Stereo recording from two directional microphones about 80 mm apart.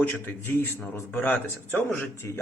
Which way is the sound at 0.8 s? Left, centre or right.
Left.